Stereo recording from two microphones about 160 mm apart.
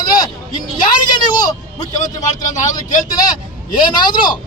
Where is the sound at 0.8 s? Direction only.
25° left (ahead or behind).